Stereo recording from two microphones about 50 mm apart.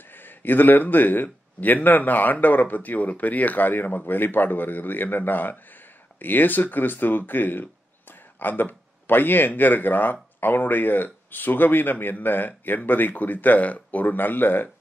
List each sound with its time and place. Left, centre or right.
0.1 s speech: left